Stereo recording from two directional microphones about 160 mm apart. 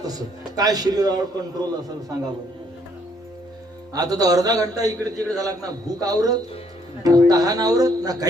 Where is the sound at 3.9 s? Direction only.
25° right (ahead or behind).